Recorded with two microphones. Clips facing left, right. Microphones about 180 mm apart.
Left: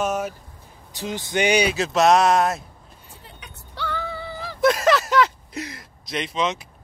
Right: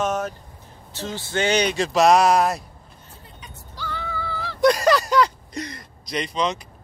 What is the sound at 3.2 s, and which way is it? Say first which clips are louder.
Vehicle: right 1 dB; 65° left (ahead or behind).